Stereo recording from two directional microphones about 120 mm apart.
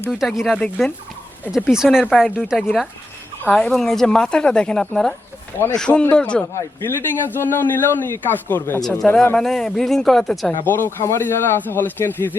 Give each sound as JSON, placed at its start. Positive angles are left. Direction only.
{"t": 0.1, "sound": "speech", "side_deg": 0}
{"t": 0.5, "sound": "a man's voice", "side_deg": 10}
{"t": 1.5, "sound": "speech", "side_deg": -5}
{"t": 3.4, "sound": "a man's voice", "side_deg": 5}
{"t": 9.3, "sound": "speech", "side_deg": 5}
{"t": 10.7, "sound": "a man's voice", "side_deg": 20}